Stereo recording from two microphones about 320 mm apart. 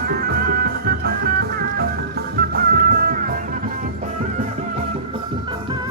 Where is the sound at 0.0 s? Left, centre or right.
Right.